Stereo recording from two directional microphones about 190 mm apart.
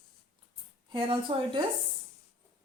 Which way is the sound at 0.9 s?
25° right (ahead or behind).